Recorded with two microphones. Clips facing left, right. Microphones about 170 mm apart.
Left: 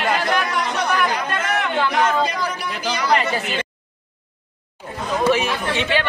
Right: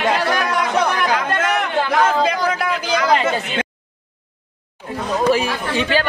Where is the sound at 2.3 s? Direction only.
90° right.